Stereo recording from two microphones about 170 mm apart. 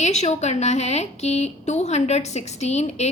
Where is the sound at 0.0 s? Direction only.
40° left (ahead or behind).